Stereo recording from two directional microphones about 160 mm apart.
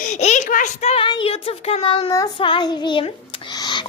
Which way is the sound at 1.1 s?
40° left (ahead or behind).